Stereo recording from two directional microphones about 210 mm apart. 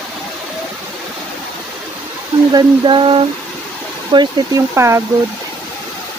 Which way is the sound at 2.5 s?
20° right (ahead or behind).